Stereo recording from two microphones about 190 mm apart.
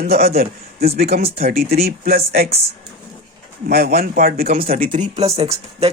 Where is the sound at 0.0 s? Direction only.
55° right (ahead or behind).